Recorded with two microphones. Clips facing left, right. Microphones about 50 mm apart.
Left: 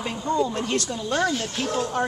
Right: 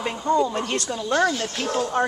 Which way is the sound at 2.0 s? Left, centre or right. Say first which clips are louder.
Right 4 dB; centre.